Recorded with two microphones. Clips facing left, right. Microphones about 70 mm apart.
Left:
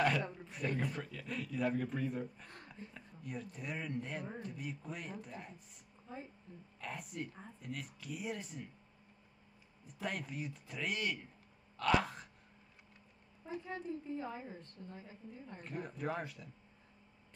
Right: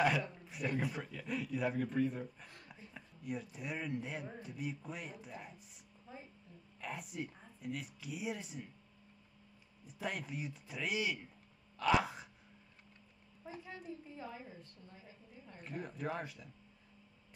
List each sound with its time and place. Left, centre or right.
0.0 s speech: centre
6.8 s speech: centre
9.8 s speech: centre
13.4 s a woman's voice: centre
14.2 s a woman's voice: left
15.6 s speech: centre